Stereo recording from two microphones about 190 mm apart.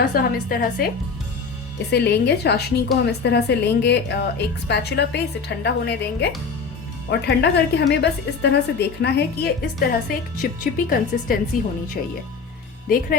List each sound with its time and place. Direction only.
0.1 s a woman's voice: 50° left (ahead or behind)
1.9 s a woman's voice: 60° left (ahead or behind)
9.8 s a woman's voice: 45° left (ahead or behind)